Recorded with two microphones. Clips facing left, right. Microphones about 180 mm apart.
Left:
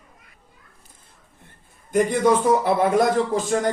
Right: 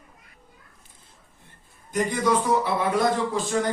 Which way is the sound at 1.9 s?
50° left (ahead or behind).